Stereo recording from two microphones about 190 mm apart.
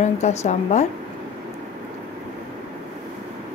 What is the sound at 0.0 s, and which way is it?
Speech, 35° left (ahead or behind).